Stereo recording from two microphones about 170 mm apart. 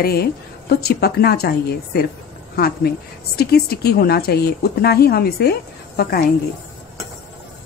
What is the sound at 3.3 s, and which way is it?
A woman's voice, 65° left (ahead or behind).